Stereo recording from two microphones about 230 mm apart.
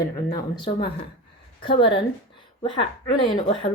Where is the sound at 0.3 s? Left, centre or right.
Centre.